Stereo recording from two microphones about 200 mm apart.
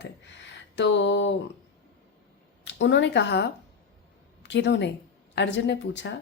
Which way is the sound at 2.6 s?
65° left (ahead or behind).